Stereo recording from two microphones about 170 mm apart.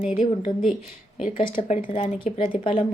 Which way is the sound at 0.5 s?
30° left (ahead or behind).